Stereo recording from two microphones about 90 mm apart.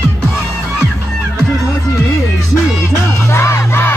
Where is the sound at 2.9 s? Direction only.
30° left (ahead or behind).